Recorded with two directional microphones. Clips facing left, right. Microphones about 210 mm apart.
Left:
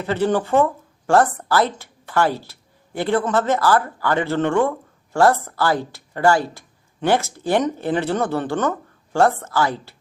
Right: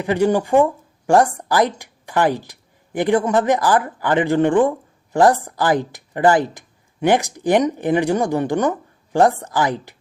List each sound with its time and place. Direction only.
0.0 s a woman's voice: 15° right (ahead or behind)